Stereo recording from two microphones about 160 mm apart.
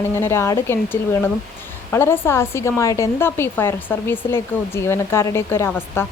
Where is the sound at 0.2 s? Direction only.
15° left (ahead or behind).